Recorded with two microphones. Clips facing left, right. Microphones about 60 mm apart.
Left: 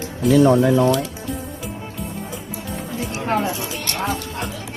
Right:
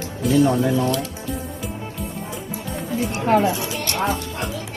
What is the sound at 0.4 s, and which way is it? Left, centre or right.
Speech, left.